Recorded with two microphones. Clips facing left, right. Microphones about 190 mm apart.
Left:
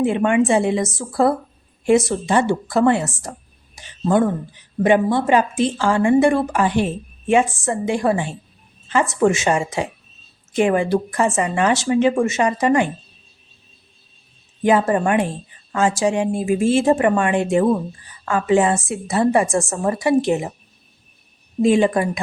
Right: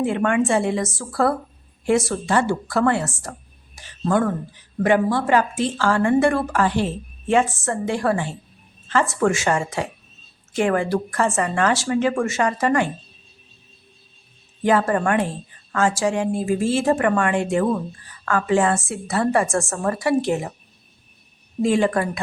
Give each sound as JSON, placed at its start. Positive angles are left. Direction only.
{"t": 0.0, "sound": "a woman's voice", "side_deg": 20}
{"t": 14.6, "sound": "a woman's voice", "side_deg": 20}
{"t": 21.6, "sound": "a woman's voice", "side_deg": 20}